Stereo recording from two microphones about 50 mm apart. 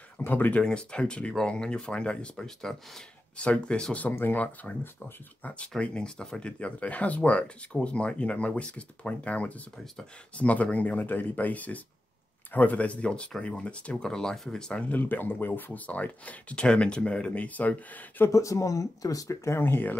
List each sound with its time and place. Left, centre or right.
0.2 s speech: left
0.6 s speech: left
2.4 s speech: centre
3.3 s speech: left
4.1 s speech: left
4.7 s speech: centre
14.5 s speech: centre
15.0 s speech: left
18.3 s speech: left
19.2 s speech: left
19.6 s speech: left